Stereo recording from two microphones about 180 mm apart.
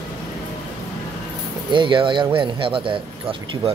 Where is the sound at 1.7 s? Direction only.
25° right (ahead or behind).